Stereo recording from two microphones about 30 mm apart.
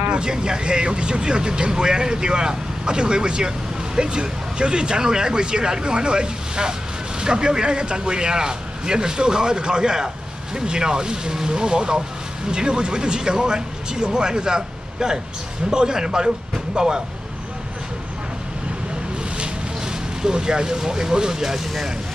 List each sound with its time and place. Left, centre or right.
0.1 s speech: right
19.8 s speech: right